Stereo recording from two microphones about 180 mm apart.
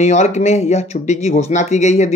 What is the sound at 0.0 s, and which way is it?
Speech, 40° left (ahead or behind).